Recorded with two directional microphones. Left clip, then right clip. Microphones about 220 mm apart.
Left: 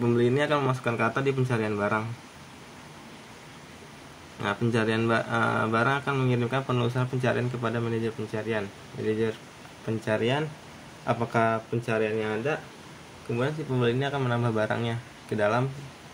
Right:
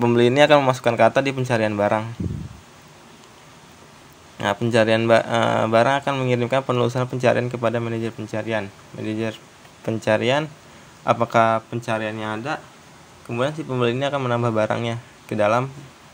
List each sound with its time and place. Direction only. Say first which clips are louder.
0.0 s speech: right 9 dB; 45° right (ahead or behind)
4.4 s speech: right 8 dB; 35° right (ahead or behind)
10.0 s speech: right 8 dB; 40° right (ahead or behind)
13.4 s speech: right 6 dB; 30° right (ahead or behind)